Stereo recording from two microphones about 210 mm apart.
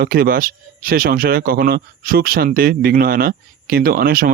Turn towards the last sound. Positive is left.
turn(degrees=-45)  # may be behind; listen again after turning